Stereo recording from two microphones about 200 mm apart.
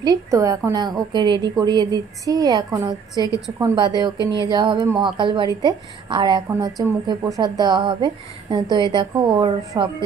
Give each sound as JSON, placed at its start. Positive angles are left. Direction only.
{"t": 0.0, "sound": "a woman's voice", "side_deg": -15}